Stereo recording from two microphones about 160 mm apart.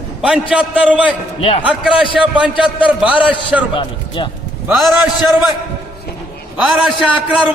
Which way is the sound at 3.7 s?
30° left (ahead or behind).